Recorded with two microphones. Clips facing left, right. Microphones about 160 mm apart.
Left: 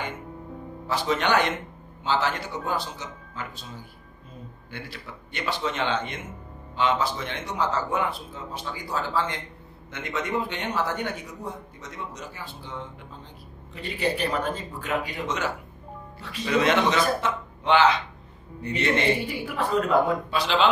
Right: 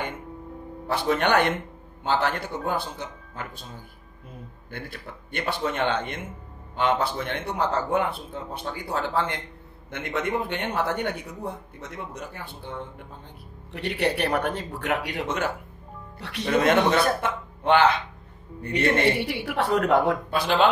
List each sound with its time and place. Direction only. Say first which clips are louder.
0.8 s a man's voice: right 2 dB; 55° right (ahead or behind)
4.6 s a man's voice: right 2 dB; 50° right (ahead or behind)
13.7 s a woman's voice: right 2 dB; 70° right (ahead or behind); by 15.5 s 55° right (ahead or behind)
16.2 s a man's voice: right 1 dB; 70° right (ahead or behind); by 20.6 s 50° right (ahead or behind)